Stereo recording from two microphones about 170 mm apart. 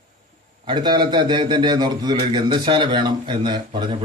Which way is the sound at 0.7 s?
25° right (ahead or behind).